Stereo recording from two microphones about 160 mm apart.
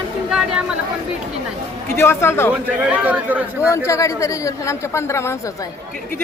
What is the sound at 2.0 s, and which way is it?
Speech, 15° left (ahead or behind).